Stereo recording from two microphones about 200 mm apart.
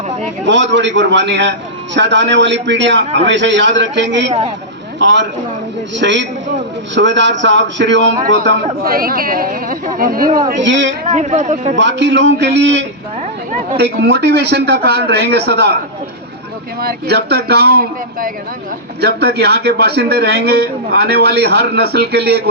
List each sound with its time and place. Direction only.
0.4 s a man's voice: 65° right (ahead or behind)
8.4 s a man's voice: 50° right (ahead or behind)
10.6 s a man's voice: 65° right (ahead or behind)
11.1 s speech: 35° right (ahead or behind)
11.8 s a man's voice: 65° right (ahead or behind)
13.7 s a man's voice: 55° right (ahead or behind)
16.8 s a man's voice: 55° right (ahead or behind)